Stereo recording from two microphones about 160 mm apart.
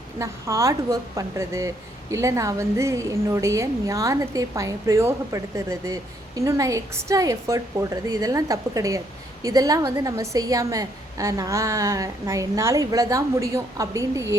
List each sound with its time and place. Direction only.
0.2 s a woman's voice: 20° right (ahead or behind)